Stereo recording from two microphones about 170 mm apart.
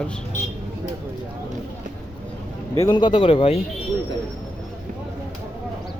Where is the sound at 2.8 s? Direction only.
25° left (ahead or behind).